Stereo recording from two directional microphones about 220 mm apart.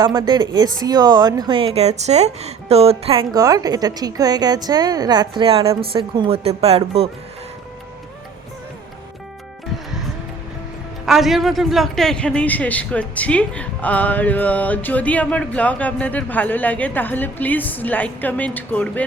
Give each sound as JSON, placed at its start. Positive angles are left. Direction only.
{"t": 0.0, "sound": "speech", "side_deg": -15}
{"t": 11.0, "sound": "speech", "side_deg": 0}